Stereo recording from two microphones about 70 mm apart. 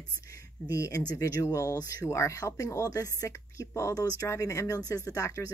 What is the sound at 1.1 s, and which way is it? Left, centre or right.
Speech, left.